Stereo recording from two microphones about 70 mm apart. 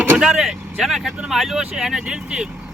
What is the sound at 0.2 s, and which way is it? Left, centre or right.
Speech, centre.